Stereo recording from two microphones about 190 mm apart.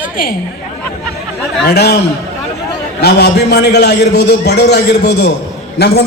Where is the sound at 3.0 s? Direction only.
60° left (ahead or behind).